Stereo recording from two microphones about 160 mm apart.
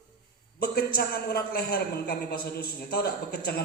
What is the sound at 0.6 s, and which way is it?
A man's voice, 70° left (ahead or behind).